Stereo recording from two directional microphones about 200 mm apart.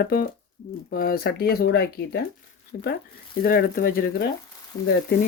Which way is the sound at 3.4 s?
50° left (ahead or behind).